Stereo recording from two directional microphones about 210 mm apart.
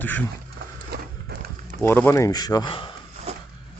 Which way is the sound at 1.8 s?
10° left (ahead or behind).